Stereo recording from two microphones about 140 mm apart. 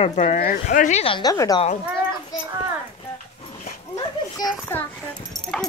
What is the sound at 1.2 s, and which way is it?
Speech, 25° left (ahead or behind).